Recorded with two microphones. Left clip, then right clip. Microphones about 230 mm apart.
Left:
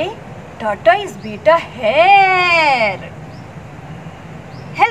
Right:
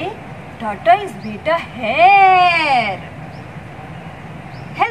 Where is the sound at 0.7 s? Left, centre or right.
Left.